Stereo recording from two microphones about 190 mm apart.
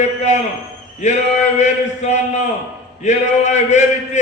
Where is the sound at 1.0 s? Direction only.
40° left (ahead or behind).